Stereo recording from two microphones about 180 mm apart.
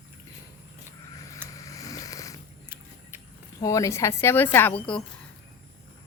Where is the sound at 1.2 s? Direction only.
20° left (ahead or behind).